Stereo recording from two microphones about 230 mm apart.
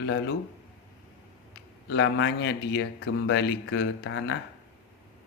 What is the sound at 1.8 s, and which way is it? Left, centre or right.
Speech, left.